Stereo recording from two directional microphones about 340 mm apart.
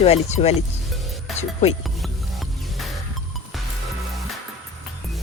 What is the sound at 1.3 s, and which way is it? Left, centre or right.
Music, centre.